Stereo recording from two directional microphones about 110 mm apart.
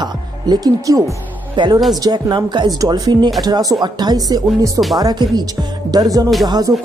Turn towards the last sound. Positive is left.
turn(degrees=-40)  # may be behind; listen again after turning